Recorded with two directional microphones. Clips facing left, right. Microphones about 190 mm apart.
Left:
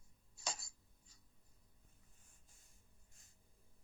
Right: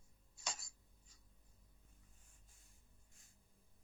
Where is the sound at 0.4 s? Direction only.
35° left (ahead or behind).